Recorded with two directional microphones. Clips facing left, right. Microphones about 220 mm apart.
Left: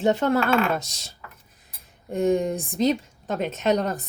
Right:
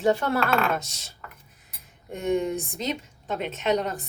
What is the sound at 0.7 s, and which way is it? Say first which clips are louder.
Speech: left 2 dB; 35° left (ahead or behind).